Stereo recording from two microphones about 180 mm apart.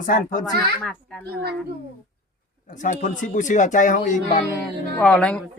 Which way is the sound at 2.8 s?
45° left (ahead or behind).